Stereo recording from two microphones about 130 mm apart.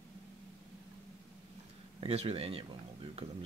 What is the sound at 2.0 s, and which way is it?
Speech, 45° right (ahead or behind).